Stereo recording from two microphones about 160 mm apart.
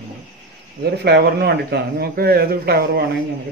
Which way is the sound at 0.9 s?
90° right.